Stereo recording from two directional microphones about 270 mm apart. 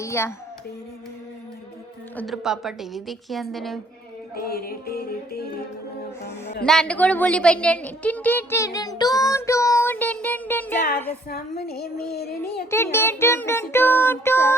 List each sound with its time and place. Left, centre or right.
0.0 s music: centre
2.1 s speech: centre
4.4 s music: left
6.7 s speech: centre
11.3 s music: left
12.7 s speech: centre